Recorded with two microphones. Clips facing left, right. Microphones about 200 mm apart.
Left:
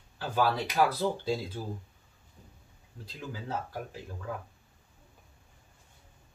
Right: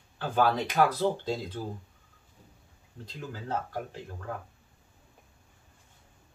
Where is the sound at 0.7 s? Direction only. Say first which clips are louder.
Right 1 dB; 10° left (ahead or behind).